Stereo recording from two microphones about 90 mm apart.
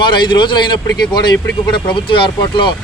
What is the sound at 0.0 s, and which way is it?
Speech, 60° left (ahead or behind).